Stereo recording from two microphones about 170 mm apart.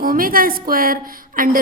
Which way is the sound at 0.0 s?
55° right (ahead or behind).